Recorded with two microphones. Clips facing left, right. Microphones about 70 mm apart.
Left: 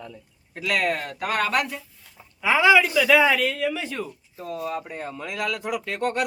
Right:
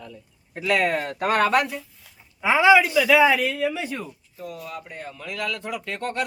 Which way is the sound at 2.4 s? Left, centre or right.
Right.